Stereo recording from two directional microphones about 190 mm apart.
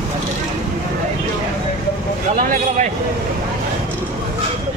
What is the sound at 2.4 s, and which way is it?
Speech, 45° right (ahead or behind).